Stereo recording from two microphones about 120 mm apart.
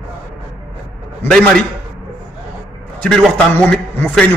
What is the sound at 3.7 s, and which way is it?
Speech, 10° left (ahead or behind).